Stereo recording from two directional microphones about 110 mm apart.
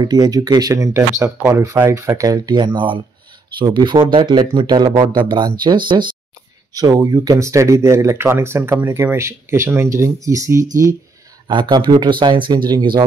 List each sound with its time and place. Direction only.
0.0 s speech: 35° right (ahead or behind)
6.7 s speech: 35° right (ahead or behind)
11.4 s speech: 45° right (ahead or behind)